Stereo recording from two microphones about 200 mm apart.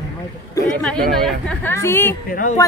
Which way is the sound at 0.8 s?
5° left (ahead or behind).